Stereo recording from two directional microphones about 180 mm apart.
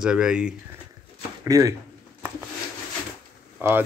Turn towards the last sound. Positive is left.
turn(degrees=-10)  # may be behind; listen again after turning